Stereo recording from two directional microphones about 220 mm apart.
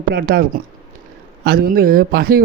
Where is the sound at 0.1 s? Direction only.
45° right (ahead or behind).